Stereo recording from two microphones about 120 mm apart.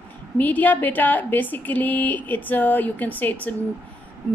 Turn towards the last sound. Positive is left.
turn(degrees=15)  # may be behind; listen again after turning